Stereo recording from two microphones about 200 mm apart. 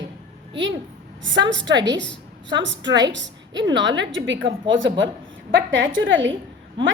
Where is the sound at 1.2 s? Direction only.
65° right (ahead or behind).